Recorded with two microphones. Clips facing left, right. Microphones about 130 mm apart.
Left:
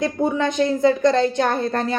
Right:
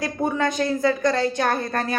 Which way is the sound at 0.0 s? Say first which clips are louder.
Left 3 dB; 20° left (ahead or behind).